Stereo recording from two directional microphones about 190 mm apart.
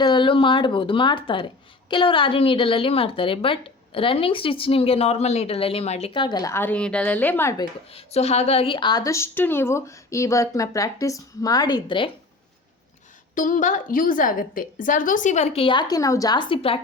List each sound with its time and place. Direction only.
0.0 s a woman's voice: 25° left (ahead or behind)
7.9 s a woman's voice: 30° left (ahead or behind)
13.3 s a woman's voice: 45° left (ahead or behind)